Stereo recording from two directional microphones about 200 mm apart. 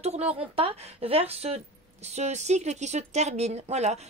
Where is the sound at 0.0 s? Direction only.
30° right (ahead or behind).